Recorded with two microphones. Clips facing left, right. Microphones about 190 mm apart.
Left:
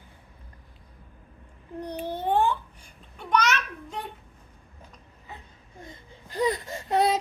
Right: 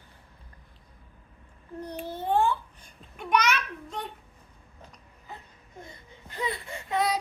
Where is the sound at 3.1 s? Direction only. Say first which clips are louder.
Left 1 dB; 15° right (ahead or behind).